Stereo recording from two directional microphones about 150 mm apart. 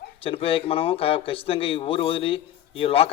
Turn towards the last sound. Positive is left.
turn(degrees=40)  # may be behind; listen again after turning